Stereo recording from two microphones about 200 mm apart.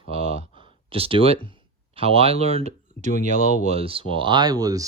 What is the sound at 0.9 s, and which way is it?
Speech, 25° right (ahead or behind).